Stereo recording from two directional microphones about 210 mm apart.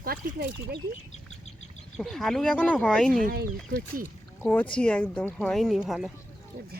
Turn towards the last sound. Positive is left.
turn(degrees=0)  # may be behind; listen again after turning